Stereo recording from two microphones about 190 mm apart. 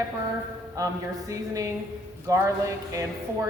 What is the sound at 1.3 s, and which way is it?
Speech, 15° right (ahead or behind).